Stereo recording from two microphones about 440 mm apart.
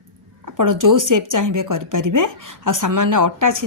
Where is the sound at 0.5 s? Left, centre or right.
Right.